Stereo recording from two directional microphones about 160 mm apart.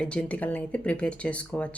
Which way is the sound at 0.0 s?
5° left (ahead or behind).